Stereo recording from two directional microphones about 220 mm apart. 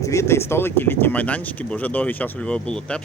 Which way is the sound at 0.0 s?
15° left (ahead or behind).